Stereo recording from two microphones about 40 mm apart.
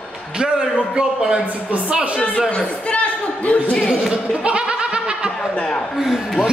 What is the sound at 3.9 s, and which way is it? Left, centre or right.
Laughter, right.